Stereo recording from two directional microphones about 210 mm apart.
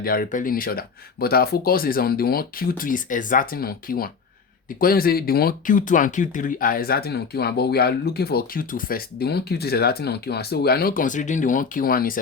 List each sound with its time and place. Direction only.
0.0 s speech: 45° left (ahead or behind)